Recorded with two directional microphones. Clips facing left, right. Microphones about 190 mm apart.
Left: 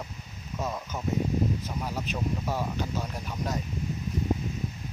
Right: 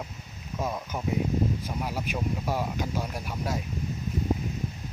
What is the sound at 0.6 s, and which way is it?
Speech, 10° right (ahead or behind).